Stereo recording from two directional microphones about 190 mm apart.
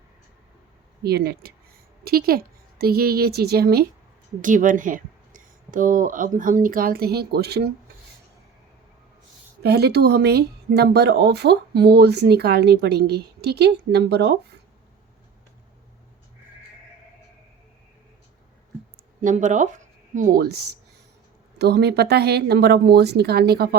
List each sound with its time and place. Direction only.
1.0 s speech: 55° right (ahead or behind)
4.4 s speech: 45° right (ahead or behind)
9.6 s speech: 60° right (ahead or behind)
19.2 s speech: 40° right (ahead or behind); by 23.6 s 55° right (ahead or behind)